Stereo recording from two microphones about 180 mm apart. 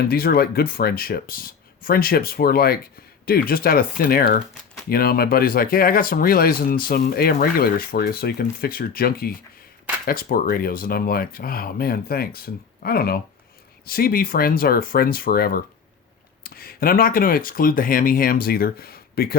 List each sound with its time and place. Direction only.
0.0 s speech: 55° left (ahead or behind)